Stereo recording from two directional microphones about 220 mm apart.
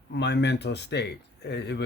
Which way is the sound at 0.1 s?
50° left (ahead or behind).